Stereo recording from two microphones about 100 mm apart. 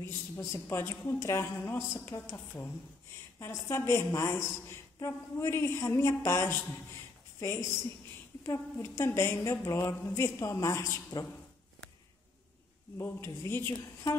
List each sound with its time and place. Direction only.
0.5 s a woman's voice: 25° left (ahead or behind)
12.9 s a woman's voice: 25° left (ahead or behind)